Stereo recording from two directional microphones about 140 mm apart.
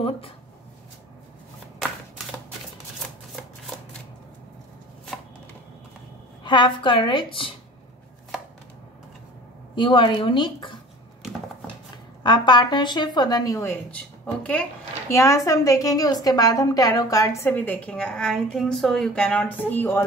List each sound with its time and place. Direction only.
6.4 s speech: 35° left (ahead or behind)
9.8 s speech: 35° left (ahead or behind)
12.2 s speech: 35° left (ahead or behind)
13.9 s speech: 10° left (ahead or behind)
15.0 s a woman's voice: 20° left (ahead or behind)